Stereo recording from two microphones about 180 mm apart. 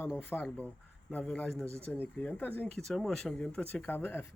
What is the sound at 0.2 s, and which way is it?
Speech, 10° left (ahead or behind).